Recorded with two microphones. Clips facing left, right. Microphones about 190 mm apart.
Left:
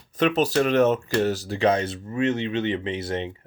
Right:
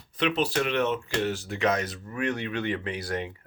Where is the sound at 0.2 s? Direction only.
45° left (ahead or behind).